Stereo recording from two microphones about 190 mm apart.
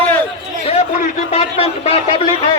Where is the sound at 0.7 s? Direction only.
40° left (ahead or behind).